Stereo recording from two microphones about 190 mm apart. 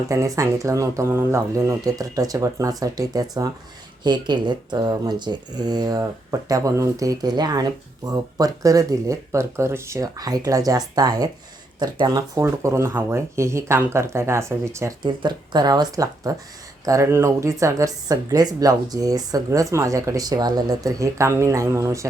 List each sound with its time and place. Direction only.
0.1 s speech: 15° right (ahead or behind)